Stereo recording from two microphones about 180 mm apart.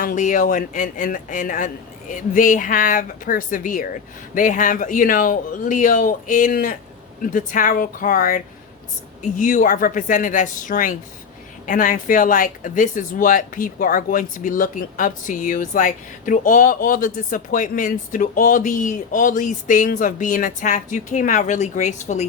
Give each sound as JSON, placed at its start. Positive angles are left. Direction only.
{"t": 0.0, "sound": "speech", "side_deg": 45}